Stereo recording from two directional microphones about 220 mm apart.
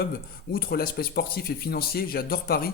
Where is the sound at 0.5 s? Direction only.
45° left (ahead or behind).